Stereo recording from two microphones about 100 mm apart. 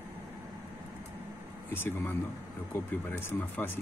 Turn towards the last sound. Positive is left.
turn(degrees=20)  # may be behind; listen again after turning